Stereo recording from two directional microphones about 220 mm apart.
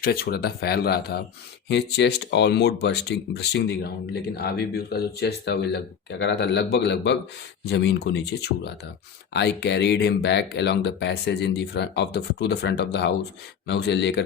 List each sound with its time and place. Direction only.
0.0 s speech: 40° left (ahead or behind)